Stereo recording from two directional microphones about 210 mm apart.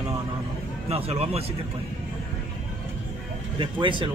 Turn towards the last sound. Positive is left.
turn(degrees=-25)  # may be behind; listen again after turning